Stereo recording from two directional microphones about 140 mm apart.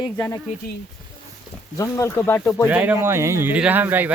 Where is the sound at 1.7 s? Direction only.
25° left (ahead or behind).